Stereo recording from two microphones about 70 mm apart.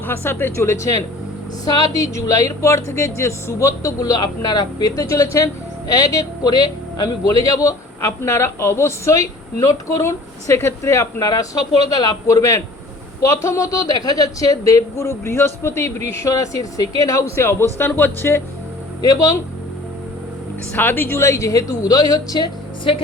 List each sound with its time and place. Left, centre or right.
0.1 s speech: left
1.6 s a woman's voice: left
4.0 s speech: left
4.9 s a woman's voice: left
5.9 s speech: left
7.3 s a woman's voice: left
11.3 s a woman's voice: left
13.9 s a woman's voice: left
19.0 s a woman's voice: left
20.7 s a woman's voice: left